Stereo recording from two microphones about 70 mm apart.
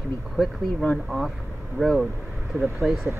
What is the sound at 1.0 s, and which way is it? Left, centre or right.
Speech, centre.